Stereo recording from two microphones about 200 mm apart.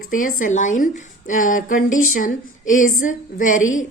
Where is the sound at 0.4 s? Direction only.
40° left (ahead or behind).